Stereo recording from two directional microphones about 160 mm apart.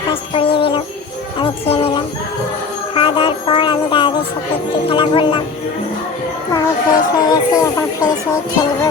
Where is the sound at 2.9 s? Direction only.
35° left (ahead or behind).